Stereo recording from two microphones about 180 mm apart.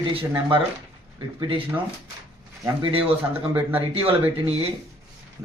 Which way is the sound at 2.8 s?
30° right (ahead or behind).